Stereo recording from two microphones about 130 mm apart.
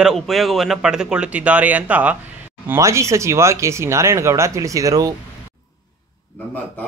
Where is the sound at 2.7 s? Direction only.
20° right (ahead or behind).